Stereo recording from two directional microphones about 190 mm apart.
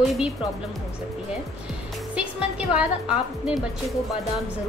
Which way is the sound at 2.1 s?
5° right (ahead or behind).